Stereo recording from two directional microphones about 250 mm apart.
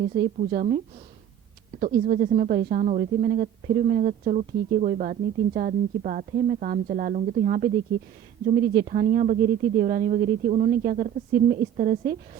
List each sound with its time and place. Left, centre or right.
0.0 s speech: right
1.8 s speech: right